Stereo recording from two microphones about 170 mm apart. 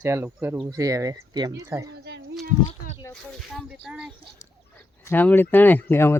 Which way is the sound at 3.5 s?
5° right (ahead or behind).